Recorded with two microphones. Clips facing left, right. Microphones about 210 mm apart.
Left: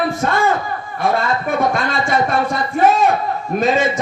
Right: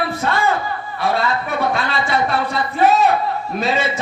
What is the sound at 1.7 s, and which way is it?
Speech, 45° left (ahead or behind).